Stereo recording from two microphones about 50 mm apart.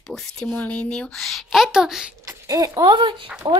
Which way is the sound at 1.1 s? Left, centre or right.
Centre.